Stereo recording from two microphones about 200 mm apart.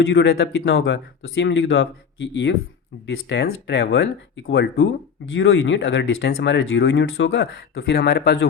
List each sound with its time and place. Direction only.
0.1 s speech: 60° left (ahead or behind)
5.3 s speech: 70° left (ahead or behind)